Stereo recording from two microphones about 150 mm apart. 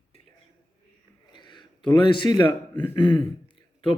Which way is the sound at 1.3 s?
30° left (ahead or behind).